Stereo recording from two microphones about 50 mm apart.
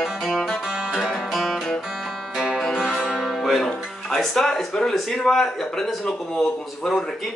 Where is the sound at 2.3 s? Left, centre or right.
Centre.